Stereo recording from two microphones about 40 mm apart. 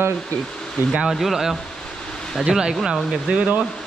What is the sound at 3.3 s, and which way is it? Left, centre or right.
Speech, right.